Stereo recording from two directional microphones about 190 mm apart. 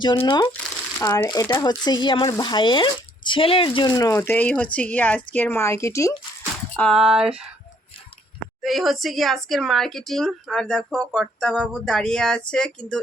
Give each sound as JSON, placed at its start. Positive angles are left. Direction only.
{"t": 0.0, "sound": "speech", "side_deg": 25}
{"t": 0.5, "sound": "speech", "side_deg": 15}
{"t": 6.7, "sound": "speech", "side_deg": 0}
{"t": 8.6, "sound": "speech", "side_deg": 0}